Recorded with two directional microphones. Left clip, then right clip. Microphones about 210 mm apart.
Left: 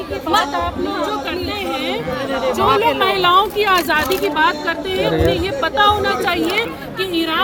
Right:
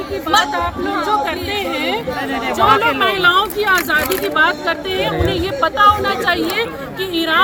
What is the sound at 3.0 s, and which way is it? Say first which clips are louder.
Speech: even; 5° right (ahead or behind).